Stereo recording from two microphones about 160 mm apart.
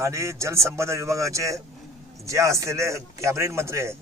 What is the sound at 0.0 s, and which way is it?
A man's voice, 20° right (ahead or behind).